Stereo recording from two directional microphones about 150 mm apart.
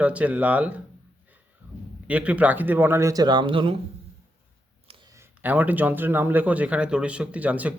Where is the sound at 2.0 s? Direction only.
10° right (ahead or behind); by 3.7 s 35° right (ahead or behind).